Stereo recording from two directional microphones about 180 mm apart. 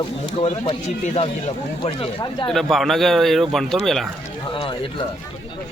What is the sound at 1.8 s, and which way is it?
Speech, 25° left (ahead or behind).